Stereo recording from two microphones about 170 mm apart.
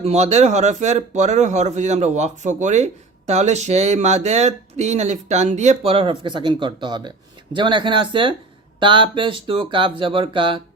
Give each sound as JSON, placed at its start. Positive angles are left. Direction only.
{"t": 0.0, "sound": "speech", "side_deg": -40}